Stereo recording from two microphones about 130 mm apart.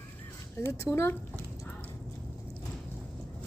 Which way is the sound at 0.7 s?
20° left (ahead or behind).